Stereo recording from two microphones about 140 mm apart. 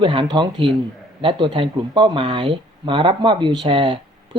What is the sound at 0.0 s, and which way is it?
Speech, 35° right (ahead or behind).